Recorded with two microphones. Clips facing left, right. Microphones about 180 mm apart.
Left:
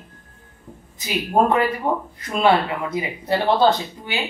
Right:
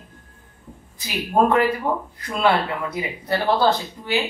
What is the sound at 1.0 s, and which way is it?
Speech, 20° left (ahead or behind).